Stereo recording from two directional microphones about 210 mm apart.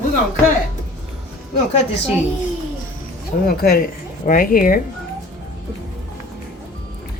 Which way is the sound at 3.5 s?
45° left (ahead or behind).